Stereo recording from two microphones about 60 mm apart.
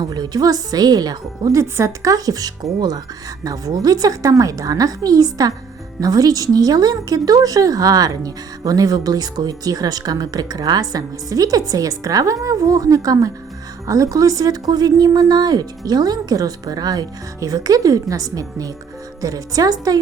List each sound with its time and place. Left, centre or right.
0.0 s speech: right
2.0 s a woman's voice: right
13.8 s a woman's voice: right